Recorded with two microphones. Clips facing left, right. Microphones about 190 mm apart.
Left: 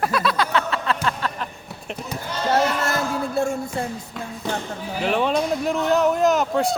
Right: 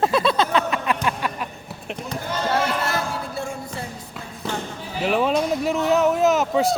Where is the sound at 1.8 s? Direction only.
5° left (ahead or behind).